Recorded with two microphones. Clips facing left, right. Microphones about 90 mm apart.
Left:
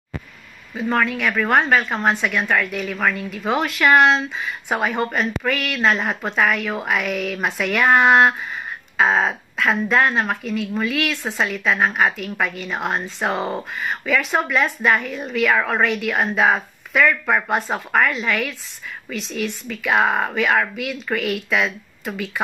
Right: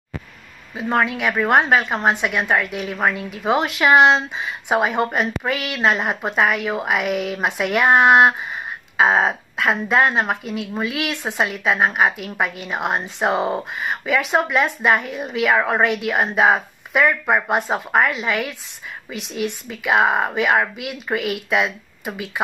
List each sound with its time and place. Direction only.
0.7 s speech: 15° right (ahead or behind)